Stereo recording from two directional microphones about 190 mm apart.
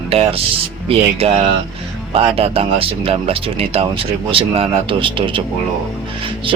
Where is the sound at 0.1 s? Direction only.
30° right (ahead or behind).